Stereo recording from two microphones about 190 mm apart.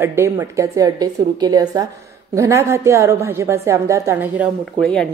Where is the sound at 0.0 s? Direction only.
15° right (ahead or behind).